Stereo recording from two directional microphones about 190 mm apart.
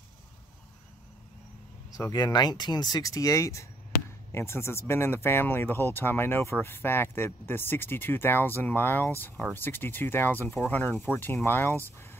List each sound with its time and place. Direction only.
2.0 s speech: 20° left (ahead or behind)